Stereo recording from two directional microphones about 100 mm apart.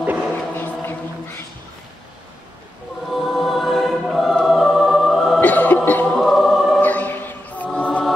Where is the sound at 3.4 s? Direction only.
Centre (ahead or behind).